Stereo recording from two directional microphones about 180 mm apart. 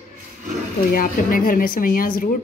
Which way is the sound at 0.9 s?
50° left (ahead or behind).